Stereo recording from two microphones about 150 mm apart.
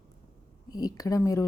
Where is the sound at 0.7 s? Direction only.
25° left (ahead or behind).